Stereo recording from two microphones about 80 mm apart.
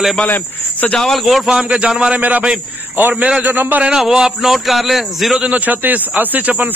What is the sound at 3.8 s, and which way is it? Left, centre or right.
A man's voice, centre.